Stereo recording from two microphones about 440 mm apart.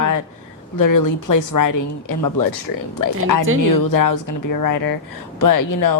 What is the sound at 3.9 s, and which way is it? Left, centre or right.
A woman's voice, left.